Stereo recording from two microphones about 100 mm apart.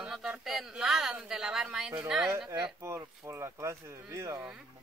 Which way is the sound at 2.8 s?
30° right (ahead or behind).